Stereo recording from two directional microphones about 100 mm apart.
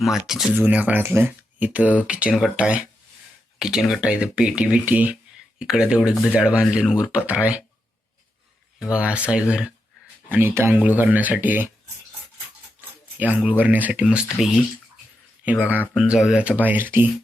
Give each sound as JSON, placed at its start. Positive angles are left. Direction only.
{"t": 0.0, "sound": "speech", "side_deg": -5}
{"t": 0.5, "sound": "speech", "side_deg": -15}
{"t": 8.8, "sound": "speech", "side_deg": -10}
{"t": 10.2, "sound": "speech", "side_deg": -20}
{"t": 13.1, "sound": "speech", "side_deg": -15}
{"t": 16.0, "sound": "speech", "side_deg": -5}